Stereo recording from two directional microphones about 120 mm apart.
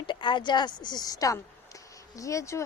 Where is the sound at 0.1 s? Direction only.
40° left (ahead or behind).